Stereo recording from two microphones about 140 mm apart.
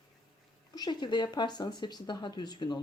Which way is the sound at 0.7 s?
30° left (ahead or behind).